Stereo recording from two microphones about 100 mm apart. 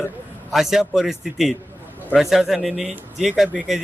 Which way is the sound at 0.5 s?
5° right (ahead or behind).